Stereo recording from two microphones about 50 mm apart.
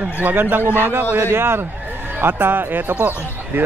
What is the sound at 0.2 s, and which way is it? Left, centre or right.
Speech, right.